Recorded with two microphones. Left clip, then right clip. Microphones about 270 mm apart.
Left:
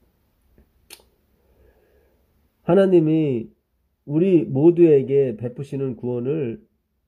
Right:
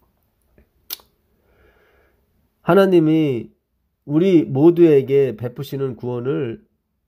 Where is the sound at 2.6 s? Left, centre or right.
Right.